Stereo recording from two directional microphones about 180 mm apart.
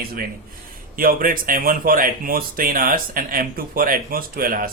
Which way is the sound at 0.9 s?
50° right (ahead or behind).